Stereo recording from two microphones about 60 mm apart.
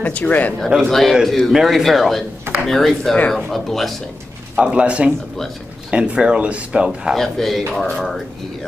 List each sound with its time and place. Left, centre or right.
0.0 s speech: left
0.8 s speech: centre
4.6 s a man's voice: centre
7.2 s speech: centre